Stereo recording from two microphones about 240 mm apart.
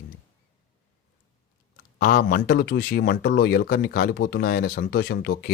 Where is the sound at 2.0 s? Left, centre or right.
Left.